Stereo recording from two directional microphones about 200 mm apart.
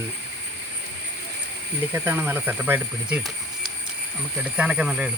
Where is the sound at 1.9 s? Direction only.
10° right (ahead or behind).